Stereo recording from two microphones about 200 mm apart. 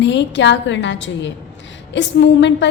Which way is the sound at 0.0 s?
65° left (ahead or behind).